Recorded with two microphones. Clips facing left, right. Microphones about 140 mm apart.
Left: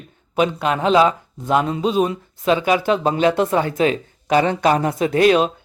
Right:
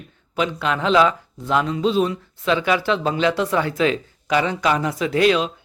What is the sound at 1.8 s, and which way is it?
Speech, 15° left (ahead or behind).